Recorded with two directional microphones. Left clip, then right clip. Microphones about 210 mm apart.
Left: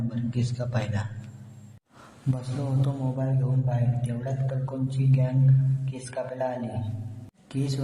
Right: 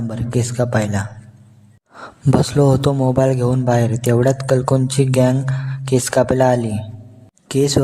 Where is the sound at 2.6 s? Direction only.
45° right (ahead or behind).